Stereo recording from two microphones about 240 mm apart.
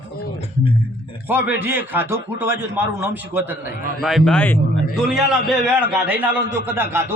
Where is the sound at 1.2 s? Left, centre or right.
Centre.